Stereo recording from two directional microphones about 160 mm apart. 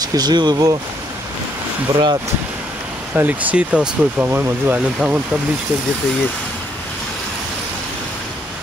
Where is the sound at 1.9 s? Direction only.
25° right (ahead or behind).